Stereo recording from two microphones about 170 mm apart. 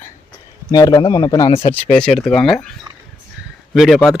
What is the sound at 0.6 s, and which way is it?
Speech, 25° left (ahead or behind).